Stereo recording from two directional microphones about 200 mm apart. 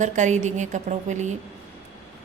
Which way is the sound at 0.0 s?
35° right (ahead or behind).